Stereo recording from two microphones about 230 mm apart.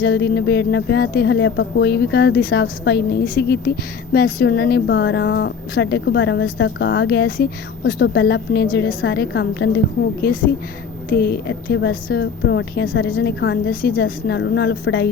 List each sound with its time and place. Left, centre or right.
0.0 s speech: left